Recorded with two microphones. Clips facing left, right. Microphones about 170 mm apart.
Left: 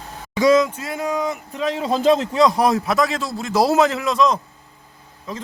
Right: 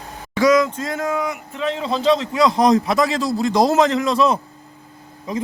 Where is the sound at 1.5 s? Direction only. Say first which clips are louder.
Left 1 dB; 40° left (ahead or behind).